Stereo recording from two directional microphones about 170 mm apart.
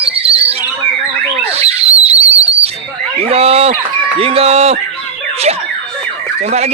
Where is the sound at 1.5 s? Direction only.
40° right (ahead or behind).